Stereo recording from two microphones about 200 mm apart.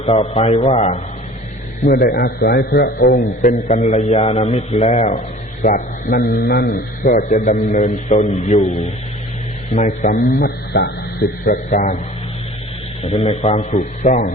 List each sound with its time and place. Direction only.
0.0 s a man's voice: 30° left (ahead or behind)
1.8 s a man's voice: 45° left (ahead or behind)
3.2 s a man's voice: 35° left (ahead or behind); by 6.7 s 50° left (ahead or behind)
6.7 s a man's voice: 40° left (ahead or behind)
10.0 s a man's voice: 45° left (ahead or behind)
11.4 s a man's voice: 40° left (ahead or behind)
13.0 s a man's voice: 30° left (ahead or behind)